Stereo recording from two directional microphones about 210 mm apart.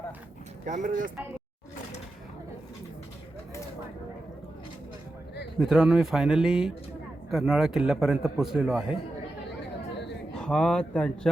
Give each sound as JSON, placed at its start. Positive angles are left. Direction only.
{"t": 0.6, "sound": "speech", "side_deg": -35}
{"t": 5.5, "sound": "a man's voice", "side_deg": -5}
{"t": 10.3, "sound": "a man's voice", "side_deg": 5}